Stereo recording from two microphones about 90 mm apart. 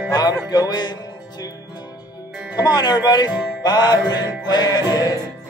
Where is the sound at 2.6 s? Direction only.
50° left (ahead or behind).